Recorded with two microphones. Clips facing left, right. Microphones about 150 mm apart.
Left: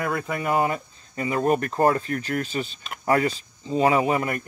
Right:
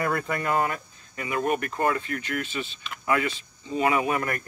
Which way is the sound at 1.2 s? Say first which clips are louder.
Left 4 dB; 35° left (ahead or behind).